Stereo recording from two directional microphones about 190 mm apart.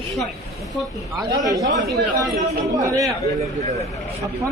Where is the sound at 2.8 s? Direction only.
15° right (ahead or behind).